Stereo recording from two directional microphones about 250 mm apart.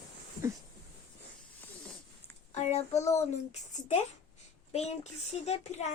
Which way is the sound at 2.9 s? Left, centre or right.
Centre.